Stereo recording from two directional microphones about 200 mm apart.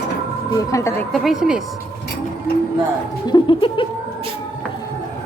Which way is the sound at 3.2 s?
25° left (ahead or behind).